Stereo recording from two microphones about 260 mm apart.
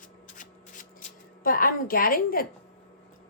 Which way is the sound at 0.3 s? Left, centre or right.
Left.